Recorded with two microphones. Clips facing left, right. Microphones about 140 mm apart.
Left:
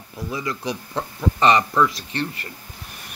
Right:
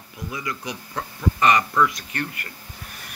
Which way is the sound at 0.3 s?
30° left (ahead or behind).